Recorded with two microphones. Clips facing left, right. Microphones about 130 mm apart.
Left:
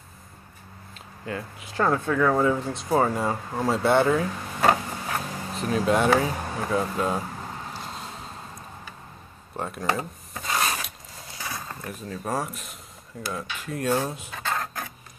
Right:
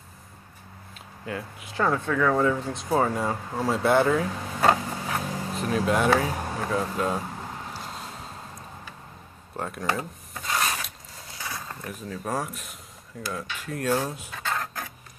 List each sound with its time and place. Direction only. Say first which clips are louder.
1.2 s speech: left 1 dB; centre (ahead or behind)
4.6 s a sound: even; 5° right (ahead or behind)
7.7 s vehicle: left 1 dB; 5° right (ahead or behind)
9.6 s speech: left 1 dB; centre (ahead or behind)
9.9 s rub: left 1 dB; 10° left (ahead or behind)
11.4 s speech: left 1 dB; 10° left (ahead or behind)
13.3 s cutlery: left 1 dB; 5° left (ahead or behind)
14.4 s a sound: left 1 dB; 15° left (ahead or behind)